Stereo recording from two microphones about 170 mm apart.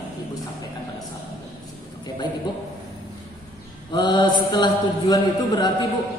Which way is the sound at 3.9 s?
25° left (ahead or behind).